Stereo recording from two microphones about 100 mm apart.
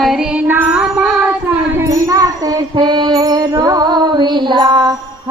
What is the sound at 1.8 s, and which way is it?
Music, 35° right (ahead or behind).